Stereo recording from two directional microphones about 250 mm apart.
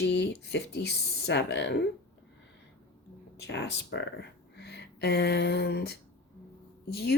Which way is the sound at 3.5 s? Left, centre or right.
Left.